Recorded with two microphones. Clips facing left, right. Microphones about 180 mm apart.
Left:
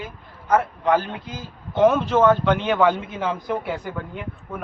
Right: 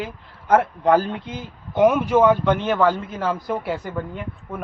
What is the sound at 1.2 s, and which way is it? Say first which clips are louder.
A woman's voice: right 2 dB; 20° right (ahead or behind).